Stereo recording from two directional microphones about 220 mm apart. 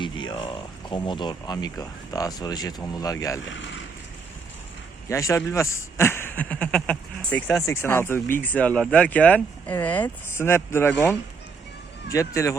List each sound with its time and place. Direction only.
0.0 s speech: 20° left (ahead or behind)
3.4 s speech: 55° left (ahead or behind)
5.0 s speech: 15° left (ahead or behind)